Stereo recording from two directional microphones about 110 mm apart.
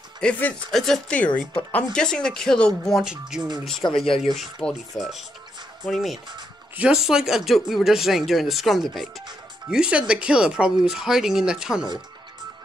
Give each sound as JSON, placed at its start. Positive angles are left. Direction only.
{"t": 0.2, "sound": "speech", "side_deg": 10}
{"t": 3.0, "sound": "speech", "side_deg": -5}